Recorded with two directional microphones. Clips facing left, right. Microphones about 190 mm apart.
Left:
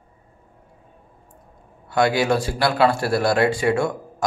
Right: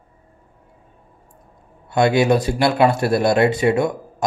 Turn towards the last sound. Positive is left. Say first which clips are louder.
# right 3 dB
turn(degrees=-20)  # may be behind; listen again after turning